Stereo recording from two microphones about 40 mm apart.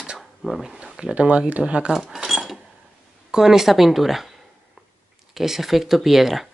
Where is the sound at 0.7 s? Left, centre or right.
Right.